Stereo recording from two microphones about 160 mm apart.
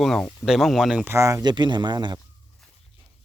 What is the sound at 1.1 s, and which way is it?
Speech, 20° right (ahead or behind).